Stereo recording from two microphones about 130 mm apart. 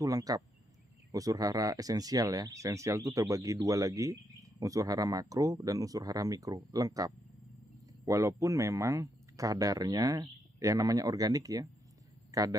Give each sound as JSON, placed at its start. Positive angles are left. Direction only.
{"t": 0.0, "sound": "a man's voice", "side_deg": -30}